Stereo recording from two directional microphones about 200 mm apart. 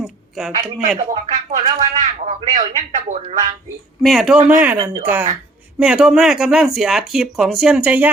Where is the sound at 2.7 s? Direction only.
40° right (ahead or behind).